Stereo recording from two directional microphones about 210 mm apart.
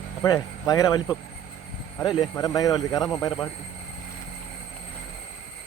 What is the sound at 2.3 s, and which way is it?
Speech, 15° left (ahead or behind).